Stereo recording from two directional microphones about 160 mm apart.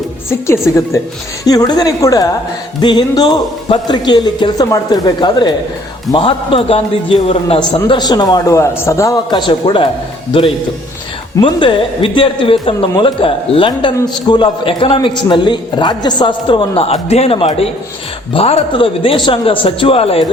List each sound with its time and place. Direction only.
0.3 s a woman's voice: 15° left (ahead or behind); by 9.9 s 30° left (ahead or behind)
11.3 s a man's voice: 30° left (ahead or behind)